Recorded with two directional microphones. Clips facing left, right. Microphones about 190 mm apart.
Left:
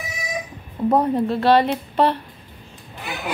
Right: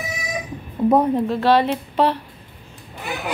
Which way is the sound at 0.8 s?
Centre (ahead or behind).